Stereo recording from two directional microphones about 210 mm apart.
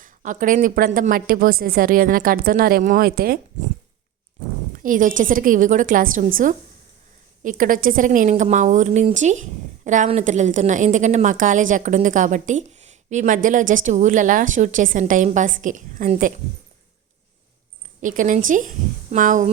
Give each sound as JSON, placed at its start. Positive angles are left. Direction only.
{"t": 0.0, "sound": "a woman's voice", "side_deg": -40}
{"t": 4.8, "sound": "a woman's voice", "side_deg": -40}
{"t": 18.0, "sound": "a woman's voice", "side_deg": -40}